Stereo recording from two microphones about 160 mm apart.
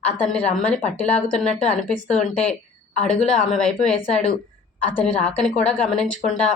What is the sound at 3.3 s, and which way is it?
A woman's voice, 5° left (ahead or behind).